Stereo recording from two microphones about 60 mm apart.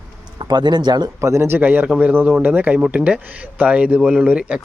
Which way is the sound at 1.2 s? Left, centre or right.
Right.